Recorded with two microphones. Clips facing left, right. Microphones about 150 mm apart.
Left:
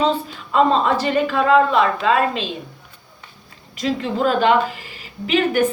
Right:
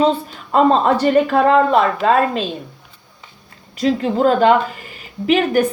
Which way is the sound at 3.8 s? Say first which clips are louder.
Right 5 dB; 35° right (ahead or behind).